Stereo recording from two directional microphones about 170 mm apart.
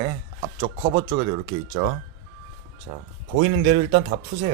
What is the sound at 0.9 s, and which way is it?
Speech, 25° right (ahead or behind).